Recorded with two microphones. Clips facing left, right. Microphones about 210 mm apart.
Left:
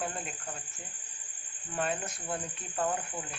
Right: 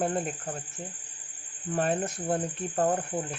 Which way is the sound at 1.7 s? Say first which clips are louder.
Right 6 dB; 50° right (ahead or behind).